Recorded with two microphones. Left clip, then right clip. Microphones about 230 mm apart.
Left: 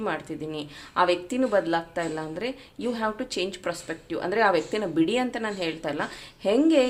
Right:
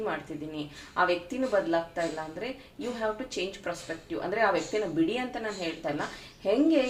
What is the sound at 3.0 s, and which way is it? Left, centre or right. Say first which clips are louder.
Speech: left 1 dB; left.